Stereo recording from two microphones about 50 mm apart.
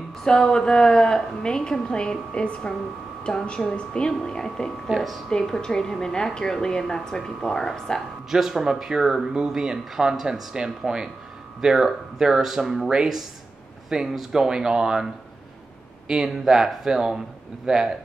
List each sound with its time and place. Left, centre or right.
0.2 s a woman's voice: centre
4.8 s speech: centre
5.3 s a woman's voice: centre
8.3 s speech: centre
16.1 s speech: centre